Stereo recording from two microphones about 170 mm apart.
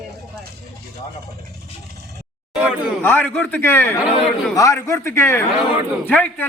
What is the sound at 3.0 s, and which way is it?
Speech, 10° left (ahead or behind).